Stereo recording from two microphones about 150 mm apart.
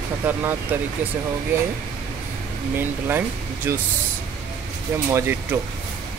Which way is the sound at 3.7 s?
15° right (ahead or behind).